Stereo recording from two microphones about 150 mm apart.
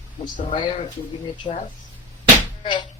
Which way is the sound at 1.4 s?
35° left (ahead or behind).